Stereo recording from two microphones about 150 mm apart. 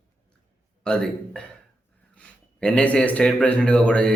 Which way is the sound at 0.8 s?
5° left (ahead or behind).